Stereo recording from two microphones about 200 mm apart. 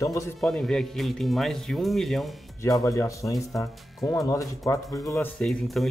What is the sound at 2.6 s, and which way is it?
Speech, 15° left (ahead or behind).